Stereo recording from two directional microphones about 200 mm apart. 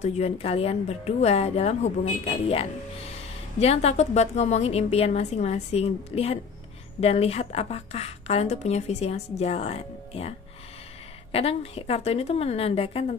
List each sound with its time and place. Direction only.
0.0 s a woman's voice: 35° left (ahead or behind)
11.3 s a woman's voice: 30° left (ahead or behind)